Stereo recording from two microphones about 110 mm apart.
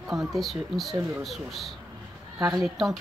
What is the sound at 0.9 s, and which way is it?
Speech, 25° right (ahead or behind).